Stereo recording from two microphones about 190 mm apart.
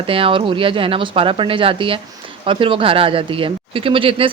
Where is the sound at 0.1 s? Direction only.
30° right (ahead or behind).